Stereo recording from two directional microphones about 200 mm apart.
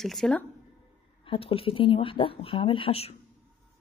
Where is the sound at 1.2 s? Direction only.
25° left (ahead or behind).